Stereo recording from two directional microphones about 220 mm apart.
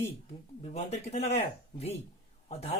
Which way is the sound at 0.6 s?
30° left (ahead or behind).